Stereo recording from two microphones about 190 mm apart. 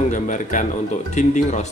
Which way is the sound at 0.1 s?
40° left (ahead or behind).